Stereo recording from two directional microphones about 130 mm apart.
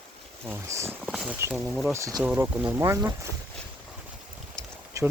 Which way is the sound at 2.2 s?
10° right (ahead or behind).